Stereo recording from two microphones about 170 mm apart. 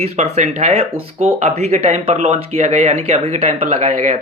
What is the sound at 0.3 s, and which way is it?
Speech, 40° right (ahead or behind).